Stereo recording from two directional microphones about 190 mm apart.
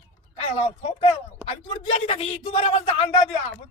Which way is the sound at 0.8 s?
35° left (ahead or behind).